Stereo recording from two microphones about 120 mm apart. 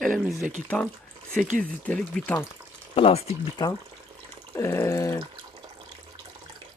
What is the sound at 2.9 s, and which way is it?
Speech, 55° left (ahead or behind).